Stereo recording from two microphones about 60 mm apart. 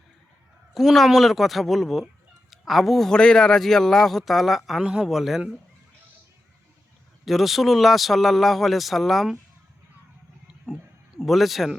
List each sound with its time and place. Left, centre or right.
0.7 s a man's voice: centre
4.8 s a man's voice: centre
5.0 s a man's voice: centre
7.3 s a man's voice: centre
11.2 s a man's voice: centre